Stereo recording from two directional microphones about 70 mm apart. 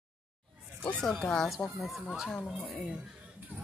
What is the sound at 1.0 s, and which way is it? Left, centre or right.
Speech, centre.